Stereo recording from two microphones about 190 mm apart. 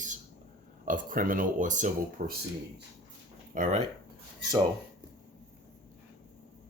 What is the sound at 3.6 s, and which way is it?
Speech, 40° right (ahead or behind).